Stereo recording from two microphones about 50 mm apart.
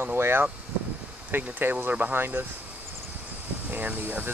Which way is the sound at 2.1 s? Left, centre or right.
Right.